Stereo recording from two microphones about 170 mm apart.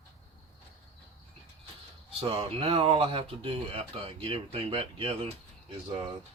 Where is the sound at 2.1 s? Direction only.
35° right (ahead or behind).